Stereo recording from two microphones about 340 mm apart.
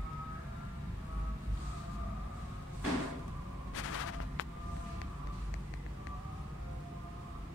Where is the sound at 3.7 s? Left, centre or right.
Left.